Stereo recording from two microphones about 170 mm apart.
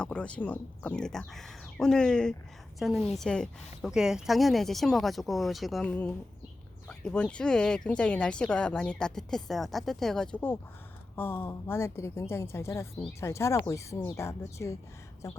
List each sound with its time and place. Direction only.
0.0 s speech: 5° left (ahead or behind)
5.9 s a woman's voice: 10° left (ahead or behind)